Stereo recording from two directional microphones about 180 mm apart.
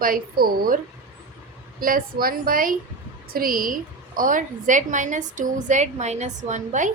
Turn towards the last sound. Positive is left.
turn(degrees=-45)  # may be behind; listen again after turning